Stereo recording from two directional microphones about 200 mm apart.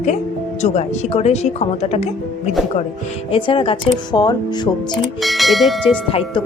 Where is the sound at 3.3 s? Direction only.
25° left (ahead or behind).